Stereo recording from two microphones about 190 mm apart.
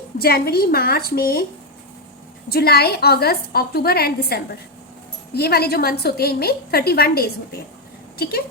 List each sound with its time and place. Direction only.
0.2 s a woman's voice: 55° left (ahead or behind)
2.5 s a woman's voice: 55° left (ahead or behind)